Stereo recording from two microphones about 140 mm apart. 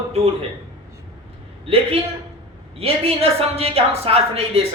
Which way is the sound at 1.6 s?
45° right (ahead or behind).